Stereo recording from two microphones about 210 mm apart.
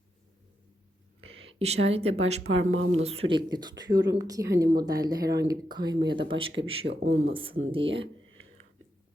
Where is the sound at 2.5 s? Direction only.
70° right (ahead or behind).